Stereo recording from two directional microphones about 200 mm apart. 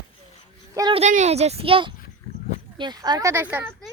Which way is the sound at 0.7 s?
20° right (ahead or behind).